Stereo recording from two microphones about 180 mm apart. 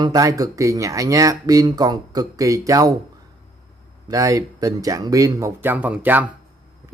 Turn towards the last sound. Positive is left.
turn(degrees=-10)  # may be behind; listen again after turning